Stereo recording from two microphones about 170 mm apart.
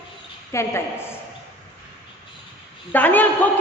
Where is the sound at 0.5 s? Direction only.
15° left (ahead or behind).